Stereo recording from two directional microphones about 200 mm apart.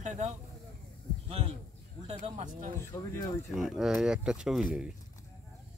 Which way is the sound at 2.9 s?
15° left (ahead or behind).